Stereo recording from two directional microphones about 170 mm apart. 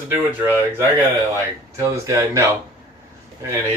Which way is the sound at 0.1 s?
10° right (ahead or behind).